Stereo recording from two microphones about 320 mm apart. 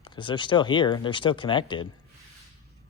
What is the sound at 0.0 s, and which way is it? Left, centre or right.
Speech, centre.